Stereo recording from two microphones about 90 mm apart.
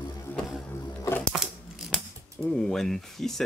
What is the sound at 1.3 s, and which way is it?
Scissors, 5° right (ahead or behind).